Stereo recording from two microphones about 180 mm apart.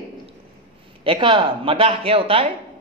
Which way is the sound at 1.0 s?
30° right (ahead or behind).